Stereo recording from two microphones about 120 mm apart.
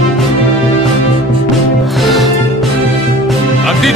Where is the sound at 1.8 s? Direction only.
Centre (ahead or behind).